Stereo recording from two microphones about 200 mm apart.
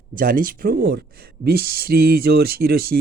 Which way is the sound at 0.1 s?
45° right (ahead or behind).